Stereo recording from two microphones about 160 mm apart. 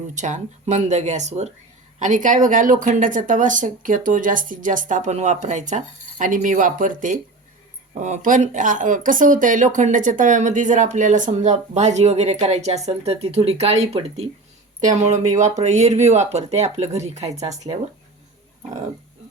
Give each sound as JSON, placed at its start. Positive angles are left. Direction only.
{"t": 0.1, "sound": "a woman's voice", "side_deg": -50}